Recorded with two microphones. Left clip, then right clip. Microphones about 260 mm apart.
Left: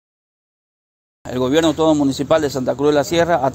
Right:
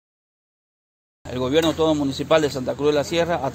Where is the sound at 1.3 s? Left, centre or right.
Left.